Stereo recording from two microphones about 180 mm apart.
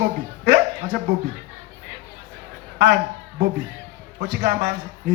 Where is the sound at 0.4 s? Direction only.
70° right (ahead or behind).